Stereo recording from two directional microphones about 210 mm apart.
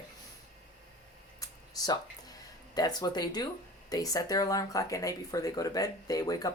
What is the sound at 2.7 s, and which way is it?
A man's voice, 20° left (ahead or behind).